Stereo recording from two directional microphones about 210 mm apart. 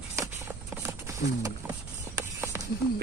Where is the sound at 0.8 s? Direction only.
10° right (ahead or behind).